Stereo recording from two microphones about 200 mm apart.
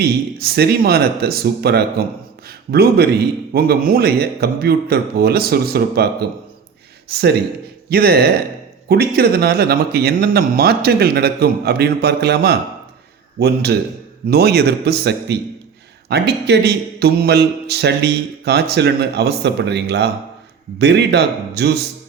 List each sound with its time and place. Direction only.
0.0 s speech: 55° right (ahead or behind)
7.1 s a man's voice: 55° right (ahead or behind)